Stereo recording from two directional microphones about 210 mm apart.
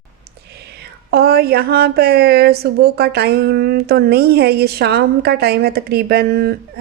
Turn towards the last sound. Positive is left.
turn(degrees=-50)  # may be behind; listen again after turning